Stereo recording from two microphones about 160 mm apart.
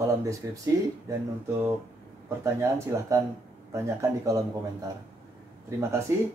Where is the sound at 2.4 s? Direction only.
15° right (ahead or behind).